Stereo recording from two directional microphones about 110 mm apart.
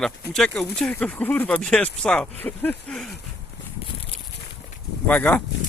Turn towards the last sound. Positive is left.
turn(degrees=10)  # may be behind; listen again after turning